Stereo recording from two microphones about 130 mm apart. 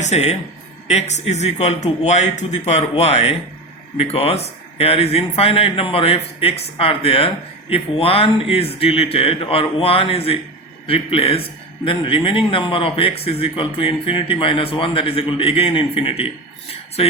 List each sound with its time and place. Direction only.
0.0 s speech: 55° left (ahead or behind)